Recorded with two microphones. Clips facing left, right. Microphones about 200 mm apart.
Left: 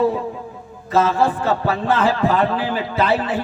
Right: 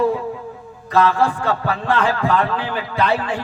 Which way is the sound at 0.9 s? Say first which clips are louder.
Even; 20° left (ahead or behind).